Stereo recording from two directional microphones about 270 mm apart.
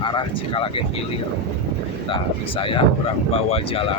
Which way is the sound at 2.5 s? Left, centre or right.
Centre.